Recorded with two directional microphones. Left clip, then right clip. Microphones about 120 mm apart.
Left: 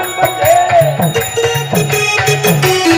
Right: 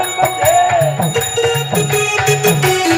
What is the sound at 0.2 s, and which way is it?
Music, 15° left (ahead or behind).